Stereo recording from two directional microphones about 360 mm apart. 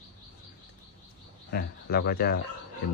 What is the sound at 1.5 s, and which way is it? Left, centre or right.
Speech, left.